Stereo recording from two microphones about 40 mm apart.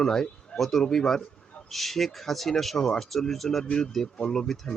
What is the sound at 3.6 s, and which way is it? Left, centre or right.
Speech, centre.